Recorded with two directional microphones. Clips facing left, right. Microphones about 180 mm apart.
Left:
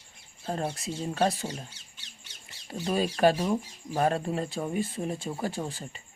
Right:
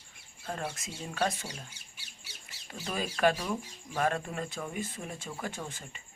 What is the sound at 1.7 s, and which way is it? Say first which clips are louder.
Squawk: left 1 dB; 10° right (ahead or behind).